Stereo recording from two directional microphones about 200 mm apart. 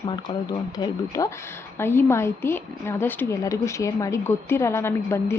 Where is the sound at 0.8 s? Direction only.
15° left (ahead or behind).